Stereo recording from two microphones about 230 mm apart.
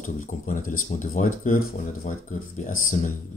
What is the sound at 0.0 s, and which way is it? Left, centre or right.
Speech, left.